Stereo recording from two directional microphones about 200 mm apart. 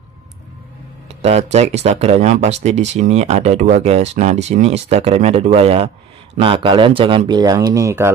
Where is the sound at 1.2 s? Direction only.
30° right (ahead or behind).